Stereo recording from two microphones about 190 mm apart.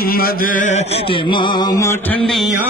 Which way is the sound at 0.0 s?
50° left (ahead or behind).